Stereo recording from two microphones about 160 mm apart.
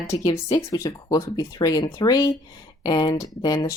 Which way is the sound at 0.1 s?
20° left (ahead or behind).